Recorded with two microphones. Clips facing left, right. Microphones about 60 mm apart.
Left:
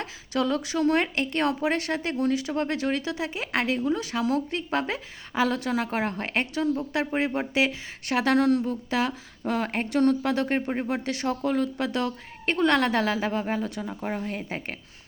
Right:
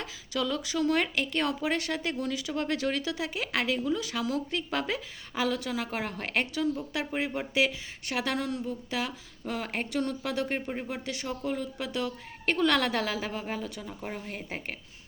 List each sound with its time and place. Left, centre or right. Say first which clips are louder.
0.0 s speech: left 5 dB; left
8.0 s speech: left 9 dB; left
8.9 s speech: left 7 dB; left
12.5 s speech: left 3 dB; left
14.2 s speech: left 6 dB; left